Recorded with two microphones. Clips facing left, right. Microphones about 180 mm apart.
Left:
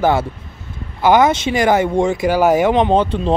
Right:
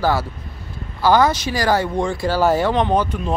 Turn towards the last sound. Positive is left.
turn(degrees=30)  # may be behind; listen again after turning